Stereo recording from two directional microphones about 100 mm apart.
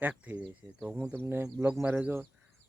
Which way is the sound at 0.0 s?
15° right (ahead or behind).